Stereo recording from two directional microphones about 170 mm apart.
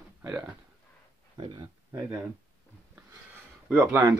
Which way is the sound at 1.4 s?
25° right (ahead or behind).